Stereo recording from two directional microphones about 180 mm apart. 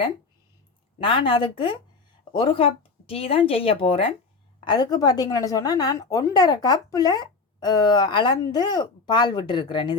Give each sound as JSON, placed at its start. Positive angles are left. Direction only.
{"t": 0.9, "sound": "a woman's voice", "side_deg": 30}